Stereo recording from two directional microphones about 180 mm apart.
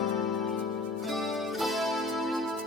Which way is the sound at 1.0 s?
Centre (ahead or behind).